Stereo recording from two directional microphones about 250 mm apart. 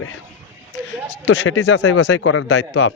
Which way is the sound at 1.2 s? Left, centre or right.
Left.